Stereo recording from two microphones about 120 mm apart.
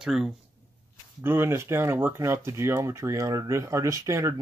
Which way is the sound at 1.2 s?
20° right (ahead or behind).